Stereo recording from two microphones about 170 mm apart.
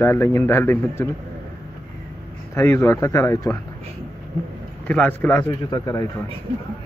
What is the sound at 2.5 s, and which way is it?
A man's voice, 15° left (ahead or behind).